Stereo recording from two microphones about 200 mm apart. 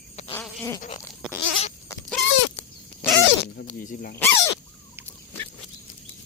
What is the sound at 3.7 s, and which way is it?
Dog, 40° left (ahead or behind).